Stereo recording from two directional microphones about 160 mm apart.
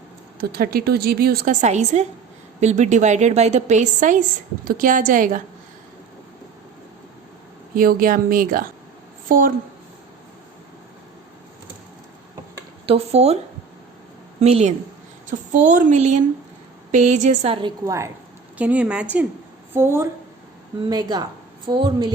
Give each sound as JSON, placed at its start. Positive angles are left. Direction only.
{"t": 0.3, "sound": "a woman's voice", "side_deg": -70}
{"t": 1.6, "sound": "a woman's voice", "side_deg": -45}
{"t": 7.8, "sound": "speech", "side_deg": -65}
{"t": 12.8, "sound": "speech", "side_deg": -40}
{"t": 14.4, "sound": "a woman's voice", "side_deg": -45}
{"t": 17.5, "sound": "a woman's voice", "side_deg": -30}
{"t": 18.5, "sound": "a woman's voice", "side_deg": -10}